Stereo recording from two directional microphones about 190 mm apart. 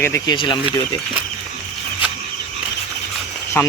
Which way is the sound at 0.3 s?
25° left (ahead or behind).